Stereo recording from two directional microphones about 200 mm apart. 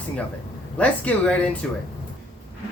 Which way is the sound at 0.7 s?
5° left (ahead or behind).